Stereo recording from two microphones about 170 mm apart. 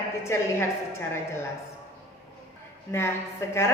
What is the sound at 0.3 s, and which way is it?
Speech, 15° left (ahead or behind).